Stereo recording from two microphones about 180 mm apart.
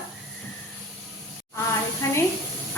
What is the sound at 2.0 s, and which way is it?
Speech, 15° left (ahead or behind).